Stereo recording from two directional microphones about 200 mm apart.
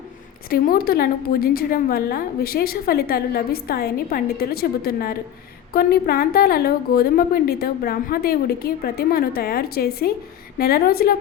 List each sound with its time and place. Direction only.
0.5 s a woman's voice: 50° left (ahead or behind)